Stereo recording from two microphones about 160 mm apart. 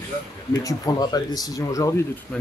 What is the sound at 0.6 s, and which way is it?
Speech, 20° left (ahead or behind).